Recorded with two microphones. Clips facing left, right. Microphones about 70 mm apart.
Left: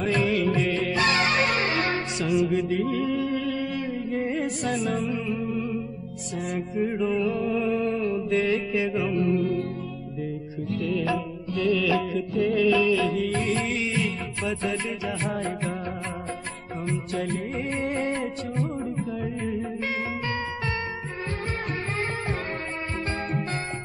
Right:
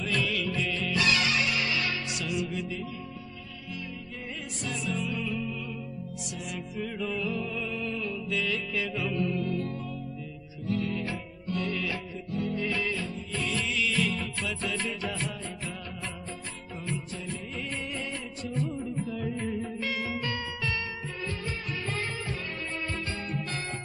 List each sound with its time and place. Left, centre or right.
0.1 s music: left
4.2 s music: left
5.1 s music: left
5.4 s music: left
12.1 s music: left
13.3 s music: left
14.8 s music: centre
15.3 s music: left
17.1 s music: left
17.6 s music: left
20.2 s music: left